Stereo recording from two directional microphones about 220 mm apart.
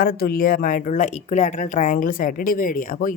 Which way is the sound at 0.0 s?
40° left (ahead or behind).